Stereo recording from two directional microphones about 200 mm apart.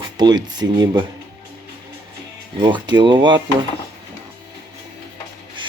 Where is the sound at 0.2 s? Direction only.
20° right (ahead or behind).